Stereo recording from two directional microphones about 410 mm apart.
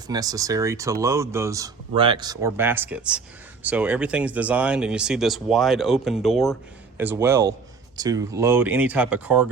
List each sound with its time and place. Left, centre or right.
0.1 s speech: centre